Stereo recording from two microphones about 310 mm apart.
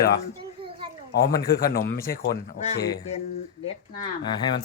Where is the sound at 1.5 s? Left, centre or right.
Left.